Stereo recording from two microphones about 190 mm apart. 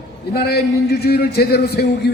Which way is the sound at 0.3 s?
55° left (ahead or behind).